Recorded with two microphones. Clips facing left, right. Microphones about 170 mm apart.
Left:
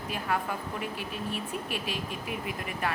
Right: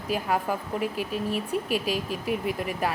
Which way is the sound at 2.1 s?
5° right (ahead or behind).